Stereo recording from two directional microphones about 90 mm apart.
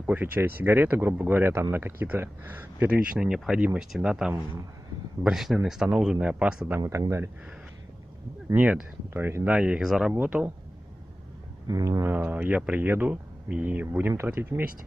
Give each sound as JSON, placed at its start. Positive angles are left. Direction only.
{"t": 0.0, "sound": "speech", "side_deg": -20}
{"t": 3.3, "sound": "speech", "side_deg": -5}
{"t": 5.3, "sound": "speech", "side_deg": -5}
{"t": 6.9, "sound": "speech", "side_deg": -30}
{"t": 8.5, "sound": "speech", "side_deg": -20}
{"t": 10.1, "sound": "speech", "side_deg": -20}
{"t": 11.6, "sound": "a sound", "side_deg": -45}
{"t": 12.0, "sound": "speech", "side_deg": -25}